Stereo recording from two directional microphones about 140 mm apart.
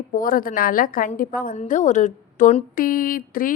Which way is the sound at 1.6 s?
60° left (ahead or behind).